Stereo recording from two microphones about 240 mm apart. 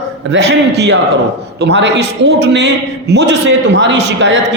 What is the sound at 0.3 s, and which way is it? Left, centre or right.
A man's voice, right.